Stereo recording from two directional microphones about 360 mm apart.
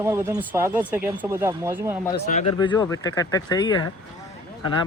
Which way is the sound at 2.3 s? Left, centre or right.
Centre.